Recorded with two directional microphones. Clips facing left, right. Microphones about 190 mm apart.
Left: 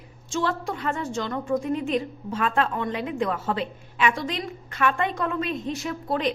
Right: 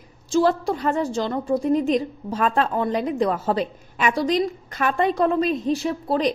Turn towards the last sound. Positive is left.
turn(degrees=-35)  # may be behind; listen again after turning